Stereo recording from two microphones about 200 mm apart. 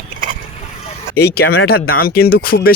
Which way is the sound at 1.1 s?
50° left (ahead or behind).